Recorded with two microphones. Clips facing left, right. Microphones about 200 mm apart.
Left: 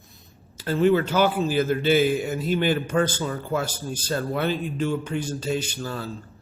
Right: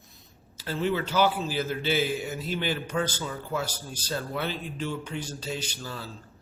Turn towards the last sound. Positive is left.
turn(degrees=50)  # may be behind; listen again after turning